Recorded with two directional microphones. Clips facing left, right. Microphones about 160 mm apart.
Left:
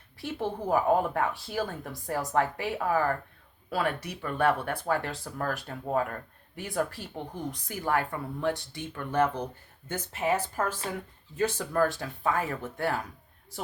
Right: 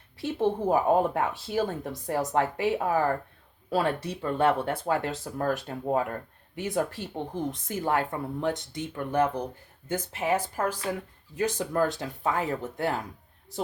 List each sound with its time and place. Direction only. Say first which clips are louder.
0.2 s speech: right 6 dB; 20° right (ahead or behind)